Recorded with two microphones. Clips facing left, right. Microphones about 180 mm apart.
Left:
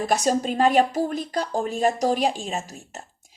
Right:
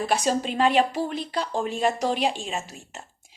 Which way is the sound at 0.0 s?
45° left (ahead or behind).